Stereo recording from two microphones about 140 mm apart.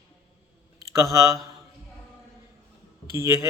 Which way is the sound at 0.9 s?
20° right (ahead or behind).